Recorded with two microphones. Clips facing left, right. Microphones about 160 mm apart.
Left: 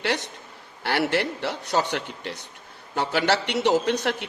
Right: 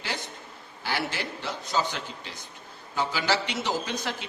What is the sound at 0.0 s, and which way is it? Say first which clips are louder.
A man's voice: left 8 dB; 75° left (ahead or behind).